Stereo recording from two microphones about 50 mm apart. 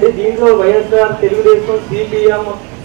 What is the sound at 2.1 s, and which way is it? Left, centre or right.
Speech, centre.